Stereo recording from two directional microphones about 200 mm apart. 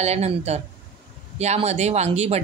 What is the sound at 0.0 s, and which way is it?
Speech, 30° right (ahead or behind).